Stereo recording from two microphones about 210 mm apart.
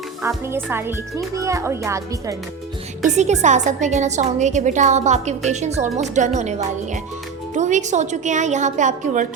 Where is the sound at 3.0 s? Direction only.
35° right (ahead or behind).